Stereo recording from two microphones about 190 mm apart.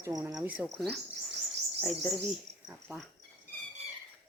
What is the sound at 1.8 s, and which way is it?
Speech, centre (ahead or behind).